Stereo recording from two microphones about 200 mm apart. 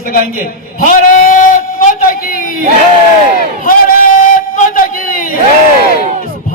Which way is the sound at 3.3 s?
45° left (ahead or behind).